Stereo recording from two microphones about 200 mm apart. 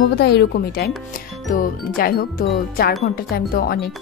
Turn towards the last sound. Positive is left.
turn(degrees=50)  # may be behind; listen again after turning